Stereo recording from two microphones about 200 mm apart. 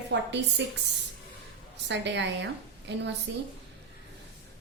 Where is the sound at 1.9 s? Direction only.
60° right (ahead or behind).